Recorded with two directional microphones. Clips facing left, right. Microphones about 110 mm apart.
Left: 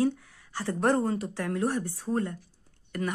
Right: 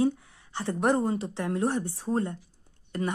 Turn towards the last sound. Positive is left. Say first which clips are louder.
# right 1 dB
turn(degrees=-25)  # may be behind; listen again after turning